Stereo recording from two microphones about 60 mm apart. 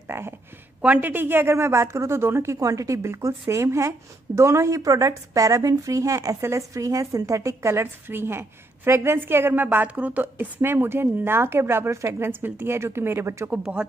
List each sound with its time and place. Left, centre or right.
0.1 s speech: right
0.8 s a woman's voice: right
2.5 s a woman's voice: right
10.6 s speech: right
13.5 s speech: right